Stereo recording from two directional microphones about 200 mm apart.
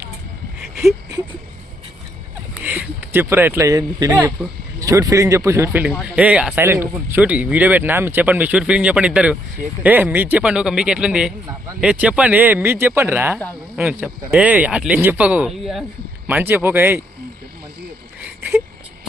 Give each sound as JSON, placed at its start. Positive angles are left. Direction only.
{"t": 2.6, "sound": "speech", "side_deg": -10}